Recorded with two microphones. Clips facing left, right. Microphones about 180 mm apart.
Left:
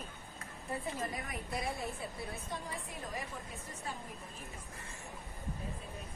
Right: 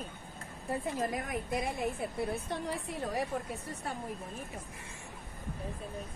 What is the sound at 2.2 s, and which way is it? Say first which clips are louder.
A woman's voice: right 11 dB; 65° right (ahead or behind).